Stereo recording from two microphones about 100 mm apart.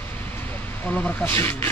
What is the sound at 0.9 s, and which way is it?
Speech, 10° left (ahead or behind).